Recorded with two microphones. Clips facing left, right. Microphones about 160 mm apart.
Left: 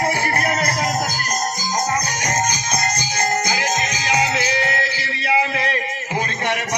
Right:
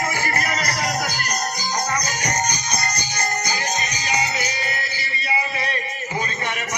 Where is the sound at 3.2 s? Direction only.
90° left; by 6.6 s 70° left (ahead or behind).